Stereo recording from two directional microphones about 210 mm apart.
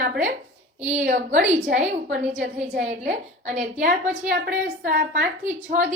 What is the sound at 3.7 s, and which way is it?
A woman's voice, 40° right (ahead or behind).